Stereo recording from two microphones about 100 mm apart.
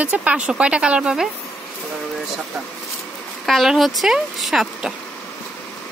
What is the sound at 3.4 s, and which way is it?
Speech, centre (ahead or behind).